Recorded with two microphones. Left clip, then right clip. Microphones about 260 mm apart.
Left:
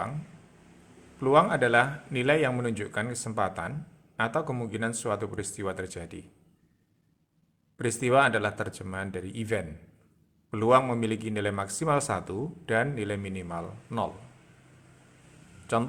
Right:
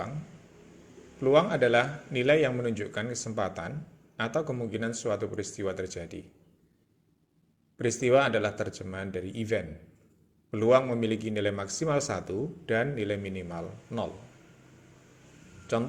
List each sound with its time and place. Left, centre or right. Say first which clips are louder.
1.2 s a man's voice: left 1 dB; centre
7.8 s a man's voice: left 1 dB; centre
15.7 s a man's voice: left 2 dB; centre